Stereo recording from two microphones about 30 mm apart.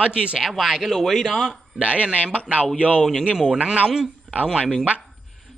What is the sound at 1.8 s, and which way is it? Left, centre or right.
Speech, right.